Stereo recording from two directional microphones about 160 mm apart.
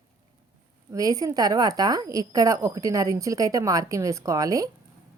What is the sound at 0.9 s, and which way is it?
A woman's voice, 20° right (ahead or behind).